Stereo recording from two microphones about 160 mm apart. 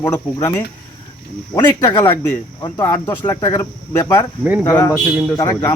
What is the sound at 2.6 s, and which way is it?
Speech, 25° left (ahead or behind).